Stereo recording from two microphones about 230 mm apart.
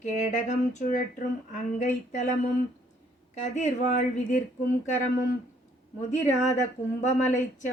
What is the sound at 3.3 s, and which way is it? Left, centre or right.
Speech, left.